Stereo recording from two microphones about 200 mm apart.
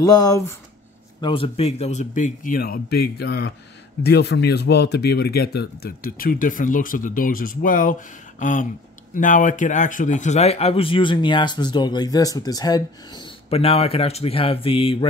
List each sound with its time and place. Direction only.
0.0 s speech: 15° left (ahead or behind)
1.2 s speech: 25° left (ahead or behind)